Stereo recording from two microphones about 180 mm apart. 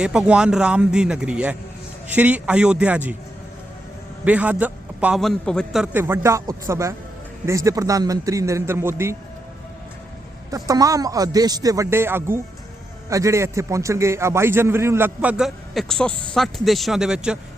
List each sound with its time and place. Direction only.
0.0 s a man's voice: 5° right (ahead or behind)
4.3 s a man's voice: 10° right (ahead or behind)
10.5 s a man's voice: 20° right (ahead or behind); by 17.3 s 5° right (ahead or behind)